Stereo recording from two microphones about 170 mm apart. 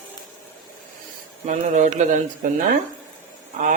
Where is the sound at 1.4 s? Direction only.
45° right (ahead or behind).